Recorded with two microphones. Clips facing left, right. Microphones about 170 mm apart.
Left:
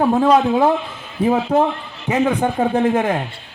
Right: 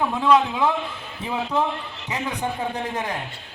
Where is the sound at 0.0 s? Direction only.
45° left (ahead or behind).